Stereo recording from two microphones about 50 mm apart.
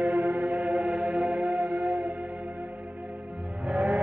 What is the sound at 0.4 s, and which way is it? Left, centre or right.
Music, centre.